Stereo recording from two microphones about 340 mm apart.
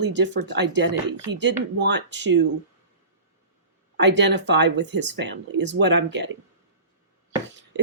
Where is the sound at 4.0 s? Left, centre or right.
Right.